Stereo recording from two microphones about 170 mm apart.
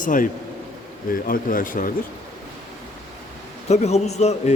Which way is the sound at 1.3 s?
55° left (ahead or behind).